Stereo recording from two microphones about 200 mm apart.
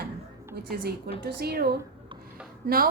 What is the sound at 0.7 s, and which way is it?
A woman's voice, 50° right (ahead or behind).